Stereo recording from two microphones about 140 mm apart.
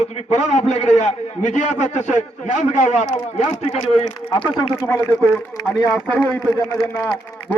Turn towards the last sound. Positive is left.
turn(degrees=15)  # may be behind; listen again after turning